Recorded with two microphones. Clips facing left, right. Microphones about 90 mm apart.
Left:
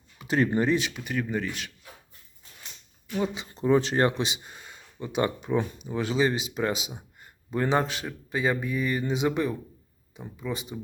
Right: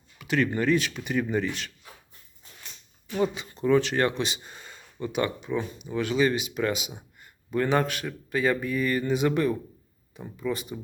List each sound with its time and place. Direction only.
0.2 s speech: 30° left (ahead or behind)
0.9 s speech: centre (ahead or behind)
3.3 s speech: 25° left (ahead or behind)
4.4 s a sound: 5° left (ahead or behind)
5.5 s speech: 35° left (ahead or behind); by 10.8 s 20° left (ahead or behind)